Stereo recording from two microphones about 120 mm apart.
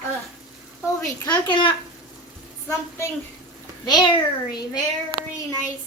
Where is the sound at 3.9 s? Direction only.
40° left (ahead or behind).